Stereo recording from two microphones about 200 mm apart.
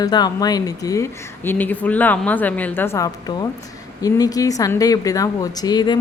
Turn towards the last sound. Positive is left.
turn(degrees=20)  # may be behind; listen again after turning